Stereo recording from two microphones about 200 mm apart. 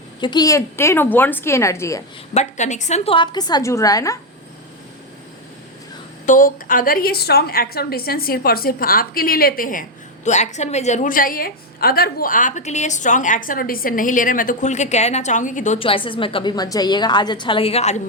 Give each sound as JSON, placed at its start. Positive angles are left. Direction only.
{"t": 0.2, "sound": "a woman's voice", "side_deg": 20}
{"t": 2.3, "sound": "a woman's voice", "side_deg": 35}
{"t": 6.2, "sound": "a woman's voice", "side_deg": 40}